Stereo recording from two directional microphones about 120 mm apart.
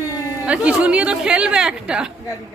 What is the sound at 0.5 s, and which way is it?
A woman's voice, 10° right (ahead or behind).